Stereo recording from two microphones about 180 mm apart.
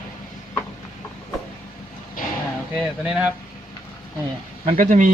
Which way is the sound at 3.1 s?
5° right (ahead or behind).